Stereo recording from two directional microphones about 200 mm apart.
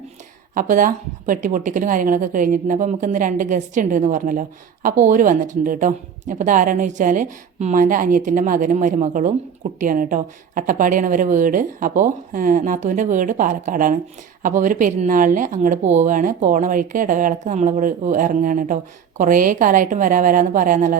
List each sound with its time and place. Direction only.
0.5 s speech: 40° right (ahead or behind)